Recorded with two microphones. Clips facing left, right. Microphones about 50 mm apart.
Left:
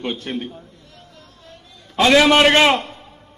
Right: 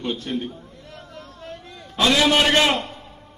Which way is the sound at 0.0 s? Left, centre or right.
Left.